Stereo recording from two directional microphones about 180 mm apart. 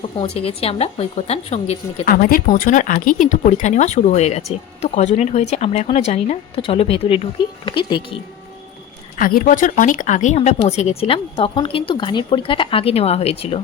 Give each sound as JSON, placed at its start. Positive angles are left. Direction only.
{"t": 0.2, "sound": "speech", "side_deg": 35}
{"t": 2.0, "sound": "speech", "side_deg": 50}
{"t": 9.1, "sound": "speech", "side_deg": 50}